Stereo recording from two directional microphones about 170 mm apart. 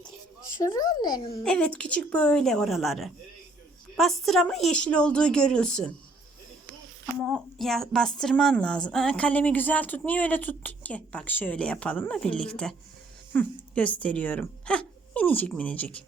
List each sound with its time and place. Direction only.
0.6 s a child's voice: 20° left (ahead or behind)
1.5 s a woman's voice: 5° left (ahead or behind)
7.2 s a woman's voice: centre (ahead or behind)